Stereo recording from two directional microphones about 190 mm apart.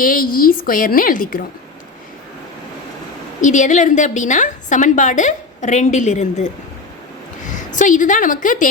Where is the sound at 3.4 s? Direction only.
40° left (ahead or behind).